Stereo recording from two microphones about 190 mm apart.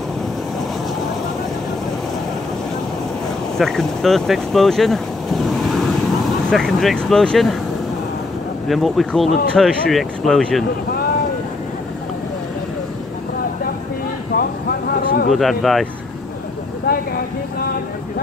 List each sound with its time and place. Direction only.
3.5 s speech: centre (ahead or behind)
8.6 s speech: centre (ahead or behind)
14.3 s vehicle: 55° left (ahead or behind)
15.3 s speech: centre (ahead or behind)